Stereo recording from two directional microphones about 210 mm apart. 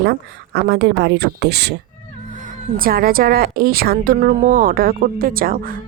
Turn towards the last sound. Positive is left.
turn(degrees=-40)  # may be behind; listen again after turning